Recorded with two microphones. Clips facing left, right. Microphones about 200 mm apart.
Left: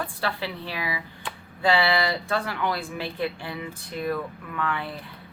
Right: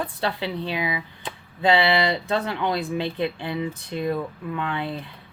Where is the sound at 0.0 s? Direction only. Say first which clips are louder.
Right 3 dB; 20° right (ahead or behind).